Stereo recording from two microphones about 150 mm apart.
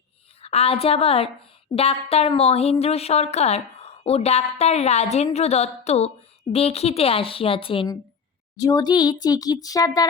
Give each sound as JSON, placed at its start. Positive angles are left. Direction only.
{"t": 0.4, "sound": "a woman's voice", "side_deg": 40}
{"t": 8.5, "sound": "speech", "side_deg": 25}